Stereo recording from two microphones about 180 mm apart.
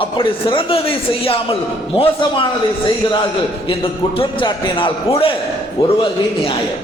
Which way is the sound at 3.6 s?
30° left (ahead or behind).